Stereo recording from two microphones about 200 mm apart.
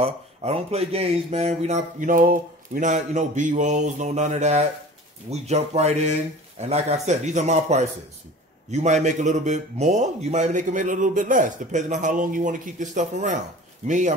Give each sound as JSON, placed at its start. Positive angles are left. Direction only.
{"t": 0.0, "sound": "speech", "side_deg": -30}